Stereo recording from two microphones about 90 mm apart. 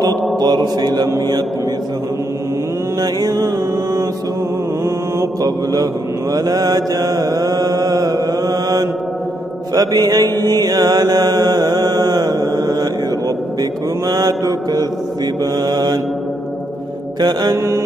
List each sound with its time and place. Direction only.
0.4 s mantra: 50° right (ahead or behind)
3.0 s mantra: 45° right (ahead or behind)
5.4 s mantra: 40° right (ahead or behind)
17.2 s mantra: 50° right (ahead or behind)